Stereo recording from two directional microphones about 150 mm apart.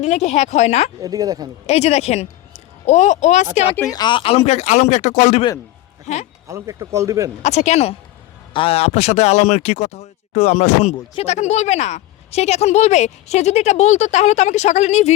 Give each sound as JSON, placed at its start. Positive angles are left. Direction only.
{"t": 0.0, "sound": "speech", "side_deg": 50}
{"t": 1.0, "sound": "speech", "side_deg": -25}
{"t": 1.6, "sound": "speech", "side_deg": 45}
{"t": 3.9, "sound": "speech", "side_deg": 30}
{"t": 6.5, "sound": "speech", "side_deg": -20}
{"t": 7.4, "sound": "speech", "side_deg": 50}